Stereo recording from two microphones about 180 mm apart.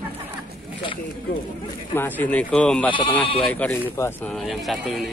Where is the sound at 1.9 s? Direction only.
10° left (ahead or behind).